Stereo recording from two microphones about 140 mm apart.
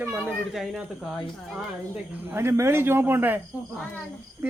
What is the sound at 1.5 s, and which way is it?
Speech, 10° right (ahead or behind).